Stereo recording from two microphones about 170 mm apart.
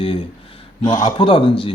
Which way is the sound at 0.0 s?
35° left (ahead or behind).